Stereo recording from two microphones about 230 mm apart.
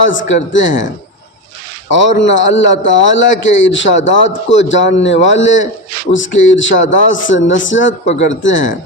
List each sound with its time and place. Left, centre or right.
0.0 s speech: left
2.2 s a man's voice: left